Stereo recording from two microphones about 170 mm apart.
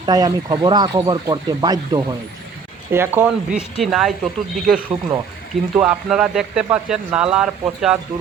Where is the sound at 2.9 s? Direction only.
15° right (ahead or behind).